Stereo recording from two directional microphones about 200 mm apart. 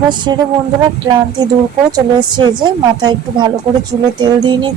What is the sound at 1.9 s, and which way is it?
A woman's voice, 20° right (ahead or behind).